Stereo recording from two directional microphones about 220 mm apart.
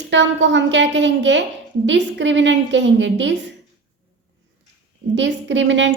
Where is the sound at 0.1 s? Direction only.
55° right (ahead or behind).